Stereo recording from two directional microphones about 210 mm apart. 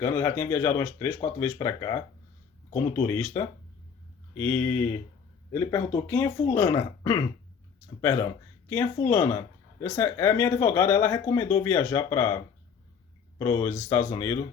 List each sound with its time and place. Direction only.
0.0 s speech: 15° left (ahead or behind)
8.7 s speech: 15° left (ahead or behind)
13.4 s speech: 15° left (ahead or behind)